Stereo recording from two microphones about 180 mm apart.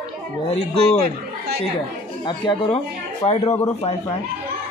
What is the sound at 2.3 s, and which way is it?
Speech, 25° left (ahead or behind).